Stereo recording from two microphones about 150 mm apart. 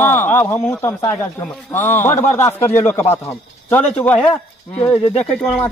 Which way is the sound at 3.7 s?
10° left (ahead or behind).